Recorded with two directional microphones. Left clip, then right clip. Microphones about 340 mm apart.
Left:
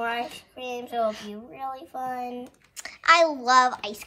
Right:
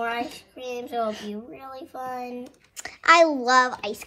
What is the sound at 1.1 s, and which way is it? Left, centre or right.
A child's voice, centre.